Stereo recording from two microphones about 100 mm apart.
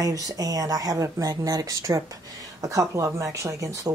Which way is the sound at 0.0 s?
35° right (ahead or behind).